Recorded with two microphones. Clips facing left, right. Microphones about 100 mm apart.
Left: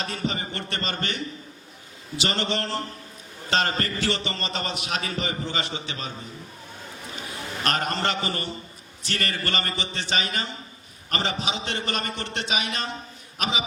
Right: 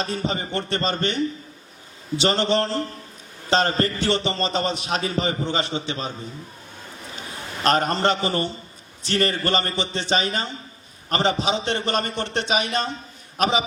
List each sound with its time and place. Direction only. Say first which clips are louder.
0.0 s a man's voice: right 4 dB; 30° right (ahead or behind)
7.6 s a man's voice: right 6 dB; 30° right (ahead or behind)